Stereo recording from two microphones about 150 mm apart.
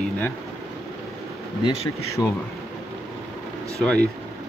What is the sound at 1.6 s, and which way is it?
Speech, 40° left (ahead or behind).